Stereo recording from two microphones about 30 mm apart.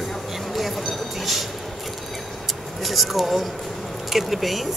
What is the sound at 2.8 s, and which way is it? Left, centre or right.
Speech, centre.